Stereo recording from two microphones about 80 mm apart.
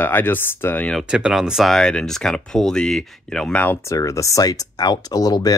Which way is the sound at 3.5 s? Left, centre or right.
Left.